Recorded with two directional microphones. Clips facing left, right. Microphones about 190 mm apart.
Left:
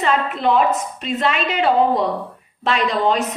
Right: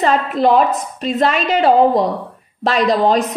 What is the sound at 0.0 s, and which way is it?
A woman's voice, 40° right (ahead or behind).